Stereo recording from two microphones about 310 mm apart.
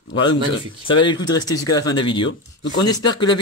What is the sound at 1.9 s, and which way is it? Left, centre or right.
Speech, centre.